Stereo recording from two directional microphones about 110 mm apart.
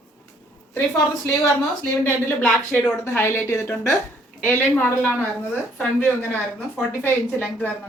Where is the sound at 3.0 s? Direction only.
25° left (ahead or behind).